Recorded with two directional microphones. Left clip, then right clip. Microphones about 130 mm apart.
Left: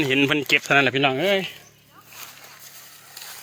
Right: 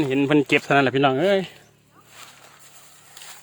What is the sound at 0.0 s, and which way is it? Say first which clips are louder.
Speech: even; 15° right (ahead or behind).